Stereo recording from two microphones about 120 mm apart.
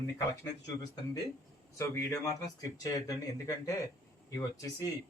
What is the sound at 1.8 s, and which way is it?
A man's voice, 25° left (ahead or behind).